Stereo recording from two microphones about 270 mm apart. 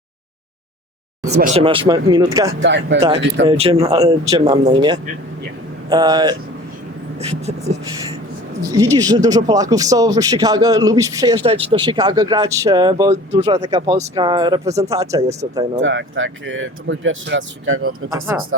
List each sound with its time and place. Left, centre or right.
1.5 s speech: centre
2.6 s speech: right
3.4 s speech: right
15.8 s speech: right
18.3 s speech: centre